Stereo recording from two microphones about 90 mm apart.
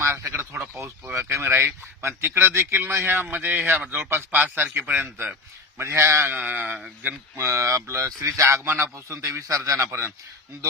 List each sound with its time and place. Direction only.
0.0 s a man's voice: 30° right (ahead or behind)
7.3 s a man's voice: 30° right (ahead or behind)